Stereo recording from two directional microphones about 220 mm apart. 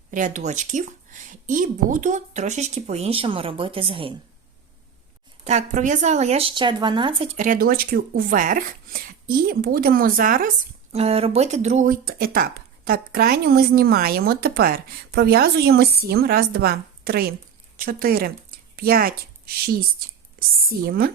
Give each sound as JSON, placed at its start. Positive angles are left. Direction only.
{"t": 0.1, "sound": "a woman's voice", "side_deg": -35}
{"t": 5.5, "sound": "speech", "side_deg": -35}
{"t": 7.3, "sound": "a woman's voice", "side_deg": -35}
{"t": 11.0, "sound": "a woman's voice", "side_deg": -25}
{"t": 20.5, "sound": "speech", "side_deg": -40}